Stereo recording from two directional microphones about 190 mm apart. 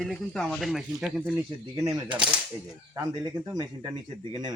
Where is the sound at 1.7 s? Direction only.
15° right (ahead or behind).